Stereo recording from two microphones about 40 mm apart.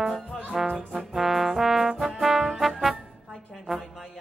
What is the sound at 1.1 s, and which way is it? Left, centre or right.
Trombone, centre.